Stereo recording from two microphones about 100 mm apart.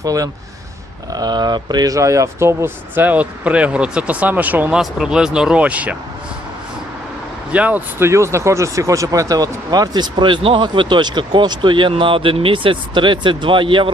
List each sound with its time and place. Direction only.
0.0 s speech: 35° right (ahead or behind); by 4.7 s 15° right (ahead or behind)
4.7 s speech: 5° right (ahead or behind)
7.5 s speech: 15° right (ahead or behind); by 13.9 s 60° right (ahead or behind)